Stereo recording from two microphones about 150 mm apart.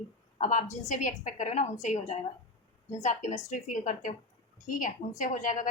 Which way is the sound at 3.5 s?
55° left (ahead or behind).